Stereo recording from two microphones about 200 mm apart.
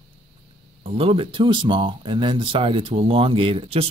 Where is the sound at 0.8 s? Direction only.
25° right (ahead or behind).